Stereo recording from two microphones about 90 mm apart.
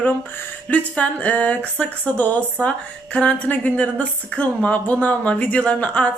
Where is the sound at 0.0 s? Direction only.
15° left (ahead or behind).